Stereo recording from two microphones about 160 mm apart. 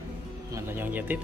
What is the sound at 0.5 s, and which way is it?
Speech, 15° right (ahead or behind).